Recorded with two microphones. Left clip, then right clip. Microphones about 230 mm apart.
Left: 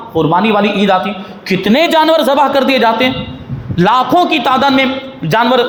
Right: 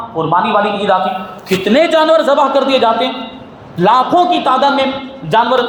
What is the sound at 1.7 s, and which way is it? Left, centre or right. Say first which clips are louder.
A man's voice: even; left.